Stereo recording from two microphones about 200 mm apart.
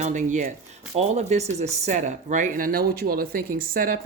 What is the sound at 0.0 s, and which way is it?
Speech, 40° right (ahead or behind).